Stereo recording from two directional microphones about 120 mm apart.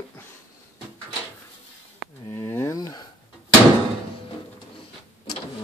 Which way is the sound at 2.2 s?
25° left (ahead or behind).